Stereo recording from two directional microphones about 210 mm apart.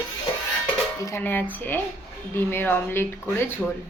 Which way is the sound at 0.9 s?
15° left (ahead or behind).